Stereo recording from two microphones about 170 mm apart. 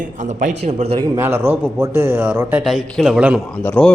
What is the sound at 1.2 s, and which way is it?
A man's voice, 15° right (ahead or behind).